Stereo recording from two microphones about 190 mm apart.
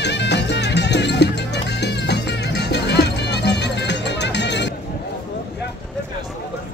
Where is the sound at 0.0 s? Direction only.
65° left (ahead or behind).